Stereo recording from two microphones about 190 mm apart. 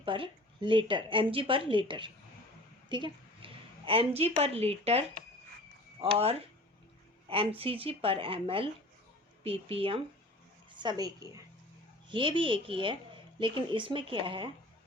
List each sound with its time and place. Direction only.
0.0 s a woman's voice: 25° right (ahead or behind)